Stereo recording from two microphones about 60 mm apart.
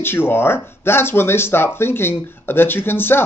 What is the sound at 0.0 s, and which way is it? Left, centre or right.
Speech, left.